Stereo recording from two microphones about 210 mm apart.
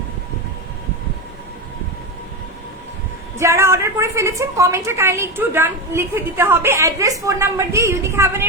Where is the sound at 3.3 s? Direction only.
15° right (ahead or behind).